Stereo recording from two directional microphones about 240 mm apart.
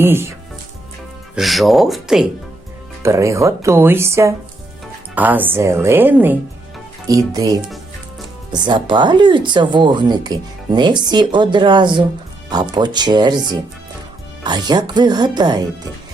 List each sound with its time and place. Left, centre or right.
0.0 s speech: centre
1.4 s speech: centre
3.0 s speech: centre